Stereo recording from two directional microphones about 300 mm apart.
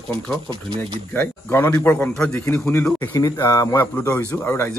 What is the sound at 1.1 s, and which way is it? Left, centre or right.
Speech, centre.